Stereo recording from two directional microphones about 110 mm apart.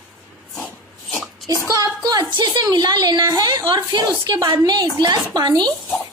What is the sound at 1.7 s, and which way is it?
A woman's voice, 35° right (ahead or behind).